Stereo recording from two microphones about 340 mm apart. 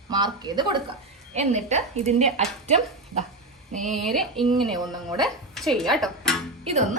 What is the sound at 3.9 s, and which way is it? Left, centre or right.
Speech, centre.